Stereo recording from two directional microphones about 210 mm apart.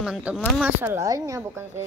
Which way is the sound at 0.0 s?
5° right (ahead or behind).